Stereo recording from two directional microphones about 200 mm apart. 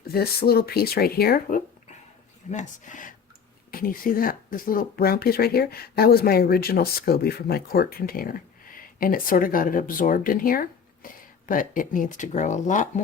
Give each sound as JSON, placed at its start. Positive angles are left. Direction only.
{"t": 0.1, "sound": "speech", "side_deg": 50}